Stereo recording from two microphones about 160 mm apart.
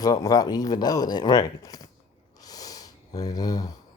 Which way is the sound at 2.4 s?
25° left (ahead or behind).